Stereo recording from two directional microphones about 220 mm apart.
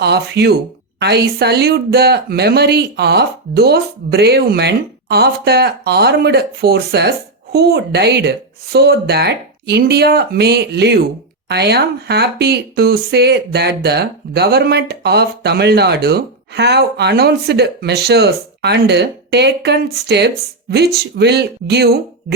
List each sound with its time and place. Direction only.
0.0 s speech: 50° right (ahead or behind)